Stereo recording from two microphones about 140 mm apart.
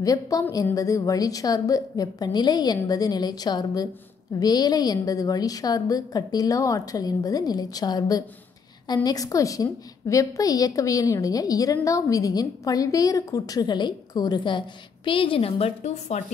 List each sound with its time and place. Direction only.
0.0 s a woman's voice: 25° left (ahead or behind); by 16.2 s 50° left (ahead or behind)